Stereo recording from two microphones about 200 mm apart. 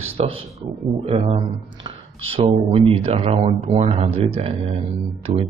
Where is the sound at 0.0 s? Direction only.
25° right (ahead or behind).